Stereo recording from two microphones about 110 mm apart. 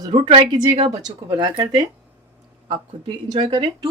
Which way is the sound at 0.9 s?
40° right (ahead or behind).